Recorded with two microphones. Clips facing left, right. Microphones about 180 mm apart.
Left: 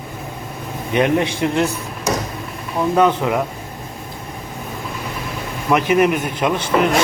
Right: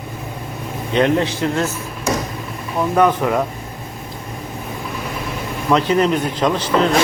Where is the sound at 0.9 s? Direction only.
15° left (ahead or behind).